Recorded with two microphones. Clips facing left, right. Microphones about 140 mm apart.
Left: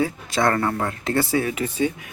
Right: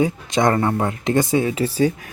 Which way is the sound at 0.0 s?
20° right (ahead or behind).